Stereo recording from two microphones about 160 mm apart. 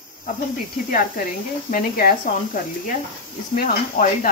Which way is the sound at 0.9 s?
60° left (ahead or behind).